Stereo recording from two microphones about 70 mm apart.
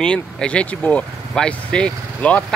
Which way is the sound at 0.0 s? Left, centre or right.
Centre.